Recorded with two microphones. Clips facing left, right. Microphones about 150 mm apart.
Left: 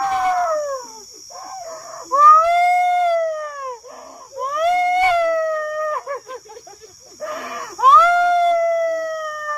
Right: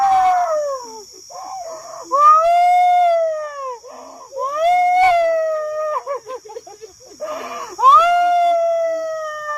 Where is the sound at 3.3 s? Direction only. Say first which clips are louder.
Right 2 dB; 30° right (ahead or behind).